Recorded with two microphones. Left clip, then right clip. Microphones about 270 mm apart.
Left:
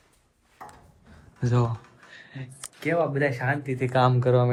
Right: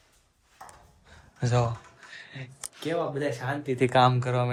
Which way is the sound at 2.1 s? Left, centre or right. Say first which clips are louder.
Right 1 dB; centre.